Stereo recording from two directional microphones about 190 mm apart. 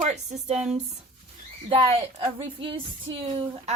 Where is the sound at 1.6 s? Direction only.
25° right (ahead or behind).